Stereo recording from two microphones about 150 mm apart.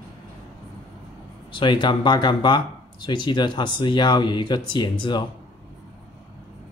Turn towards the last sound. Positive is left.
turn(degrees=30)  # may be behind; listen again after turning